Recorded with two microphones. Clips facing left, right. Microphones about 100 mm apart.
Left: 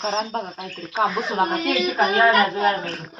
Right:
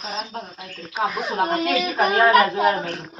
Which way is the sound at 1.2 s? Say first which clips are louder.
Even; centre (ahead or behind).